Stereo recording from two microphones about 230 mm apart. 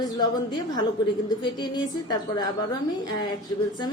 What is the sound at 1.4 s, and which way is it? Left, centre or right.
A woman's voice, centre.